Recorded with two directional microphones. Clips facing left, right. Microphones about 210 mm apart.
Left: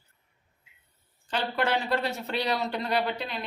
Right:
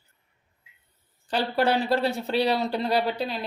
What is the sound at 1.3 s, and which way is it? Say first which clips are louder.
Speech: right 4 dB; 35° right (ahead or behind).